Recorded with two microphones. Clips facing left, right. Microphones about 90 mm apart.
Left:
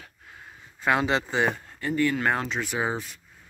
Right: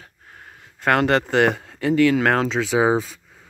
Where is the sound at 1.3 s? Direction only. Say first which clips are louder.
Right 7 dB; 80° right.